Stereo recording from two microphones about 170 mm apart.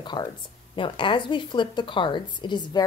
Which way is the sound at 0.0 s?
25° left (ahead or behind).